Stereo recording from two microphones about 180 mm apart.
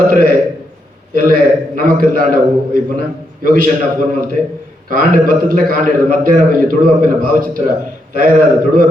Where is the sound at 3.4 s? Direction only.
50° right (ahead or behind).